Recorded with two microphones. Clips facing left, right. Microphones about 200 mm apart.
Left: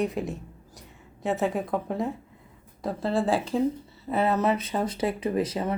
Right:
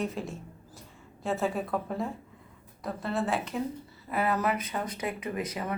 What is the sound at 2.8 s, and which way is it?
Speech, 30° left (ahead or behind).